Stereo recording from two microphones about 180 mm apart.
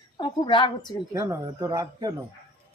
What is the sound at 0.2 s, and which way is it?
Speech, 25° left (ahead or behind).